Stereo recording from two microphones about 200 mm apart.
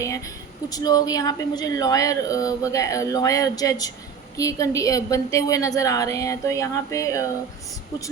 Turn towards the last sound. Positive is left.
turn(degrees=15)  # may be behind; listen again after turning